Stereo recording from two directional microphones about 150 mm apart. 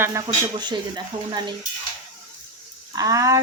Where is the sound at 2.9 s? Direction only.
25° right (ahead or behind).